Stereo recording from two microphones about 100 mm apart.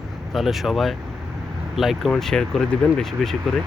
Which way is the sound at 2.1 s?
5° left (ahead or behind).